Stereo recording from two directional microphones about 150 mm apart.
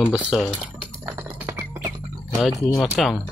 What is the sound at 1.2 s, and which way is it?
Typing, 15° right (ahead or behind).